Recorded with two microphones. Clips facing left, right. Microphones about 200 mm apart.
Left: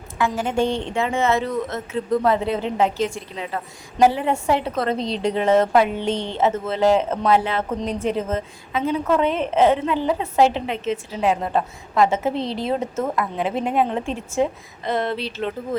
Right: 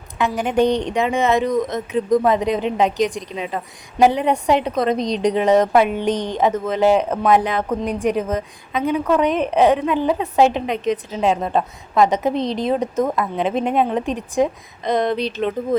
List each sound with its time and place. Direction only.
0.3 s a woman's voice: 15° right (ahead or behind)